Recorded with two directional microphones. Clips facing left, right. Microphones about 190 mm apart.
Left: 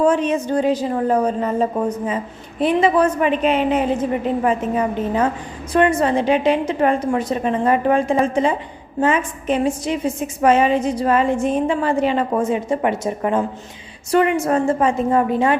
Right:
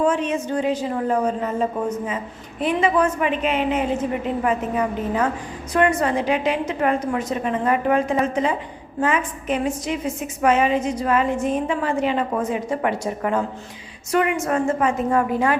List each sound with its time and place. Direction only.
0.0 s a woman's voice: 40° left (ahead or behind)